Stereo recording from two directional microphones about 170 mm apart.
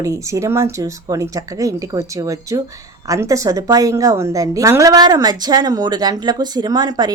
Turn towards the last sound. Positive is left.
turn(degrees=-25)  # may be behind; listen again after turning